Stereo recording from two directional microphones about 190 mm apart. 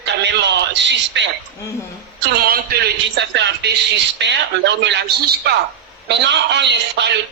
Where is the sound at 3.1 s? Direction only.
65° right (ahead or behind).